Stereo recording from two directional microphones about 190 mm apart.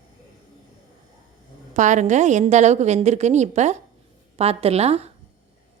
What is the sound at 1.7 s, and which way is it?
Speech, 40° right (ahead or behind).